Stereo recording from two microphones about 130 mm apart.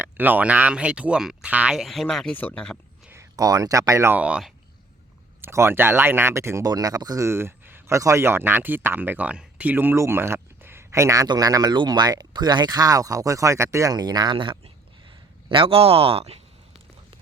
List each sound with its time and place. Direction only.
0.0 s speech: 15° right (ahead or behind); by 2.7 s 10° left (ahead or behind)
3.1 s speech: 25° right (ahead or behind)
4.2 s speech: 5° right (ahead or behind)
5.4 s speech: 20° right (ahead or behind); by 16.4 s 50° right (ahead or behind)